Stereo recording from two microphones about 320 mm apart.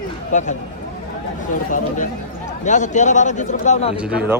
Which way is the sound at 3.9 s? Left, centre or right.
Centre.